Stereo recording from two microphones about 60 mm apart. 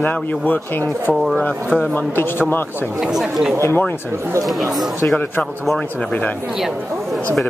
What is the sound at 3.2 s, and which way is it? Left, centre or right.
Speech, centre.